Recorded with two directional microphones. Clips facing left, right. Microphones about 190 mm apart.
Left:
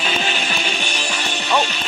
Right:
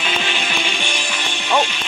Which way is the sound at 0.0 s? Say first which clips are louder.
Left 1 dB; 40° left (ahead or behind).